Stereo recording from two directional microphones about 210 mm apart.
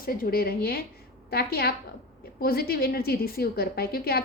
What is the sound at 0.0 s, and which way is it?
A woman's voice, 45° left (ahead or behind).